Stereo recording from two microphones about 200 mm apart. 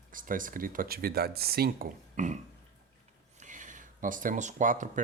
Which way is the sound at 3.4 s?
40° right (ahead or behind).